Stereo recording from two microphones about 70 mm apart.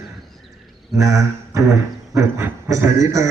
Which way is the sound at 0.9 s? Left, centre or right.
Right.